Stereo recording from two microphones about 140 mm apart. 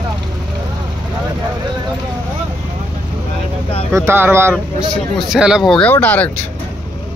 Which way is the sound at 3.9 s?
15° right (ahead or behind).